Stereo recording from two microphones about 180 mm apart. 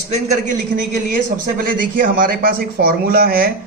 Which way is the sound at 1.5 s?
55° right (ahead or behind).